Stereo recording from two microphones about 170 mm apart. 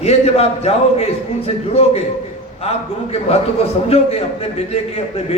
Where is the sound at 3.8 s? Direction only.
35° left (ahead or behind).